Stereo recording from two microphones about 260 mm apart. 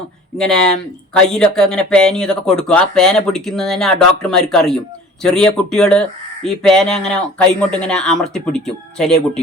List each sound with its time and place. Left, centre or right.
0.3 s speech: centre